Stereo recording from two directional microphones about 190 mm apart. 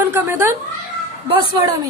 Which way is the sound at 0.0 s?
10° right (ahead or behind).